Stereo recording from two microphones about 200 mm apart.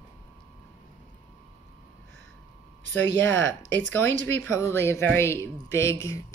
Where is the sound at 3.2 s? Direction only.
65° right (ahead or behind).